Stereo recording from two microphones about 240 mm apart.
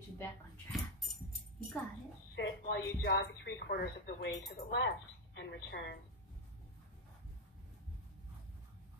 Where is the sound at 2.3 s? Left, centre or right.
Left.